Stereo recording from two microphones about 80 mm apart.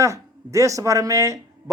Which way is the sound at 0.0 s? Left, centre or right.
Right.